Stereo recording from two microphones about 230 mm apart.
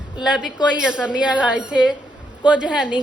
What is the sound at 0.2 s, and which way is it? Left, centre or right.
A woman's voice, centre.